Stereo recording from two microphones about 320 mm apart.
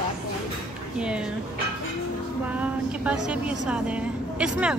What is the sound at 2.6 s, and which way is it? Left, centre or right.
A woman's voice, centre.